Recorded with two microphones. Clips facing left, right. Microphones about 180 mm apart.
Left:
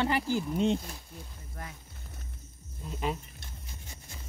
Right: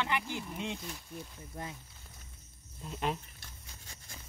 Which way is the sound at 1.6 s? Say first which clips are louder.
Right 2 dB; 20° right (ahead or behind).